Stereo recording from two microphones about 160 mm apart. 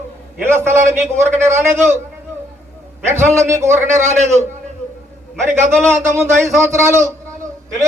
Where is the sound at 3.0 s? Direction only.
15° right (ahead or behind).